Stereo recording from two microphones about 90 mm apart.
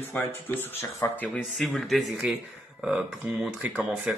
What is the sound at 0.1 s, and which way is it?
Speech, 20° left (ahead or behind).